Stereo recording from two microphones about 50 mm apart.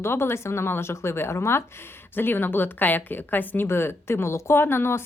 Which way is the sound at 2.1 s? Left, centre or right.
Left.